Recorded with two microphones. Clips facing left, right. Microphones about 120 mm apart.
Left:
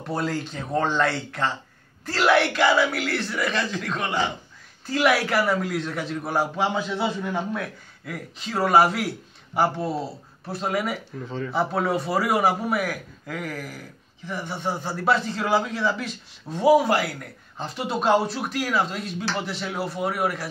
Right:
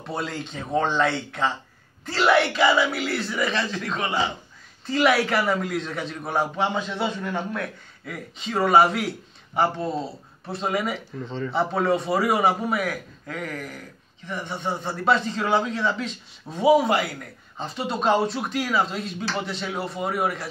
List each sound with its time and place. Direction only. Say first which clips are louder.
0.0 s a man's voice: left 3 dB; centre (ahead or behind)